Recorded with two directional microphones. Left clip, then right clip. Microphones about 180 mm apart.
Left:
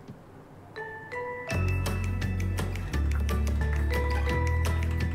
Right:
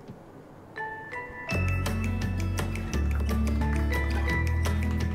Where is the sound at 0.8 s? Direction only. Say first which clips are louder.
Right 3 dB; centre (ahead or behind).